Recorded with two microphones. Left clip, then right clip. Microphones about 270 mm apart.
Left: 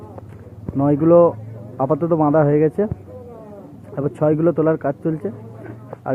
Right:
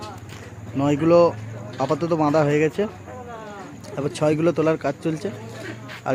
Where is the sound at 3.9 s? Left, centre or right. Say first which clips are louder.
Left 3 dB; centre.